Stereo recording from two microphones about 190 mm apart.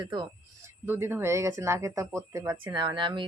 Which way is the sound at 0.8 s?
10° right (ahead or behind).